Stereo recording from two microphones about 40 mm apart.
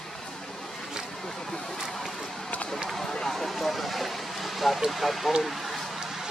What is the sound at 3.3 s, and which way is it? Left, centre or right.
Vehicle, centre.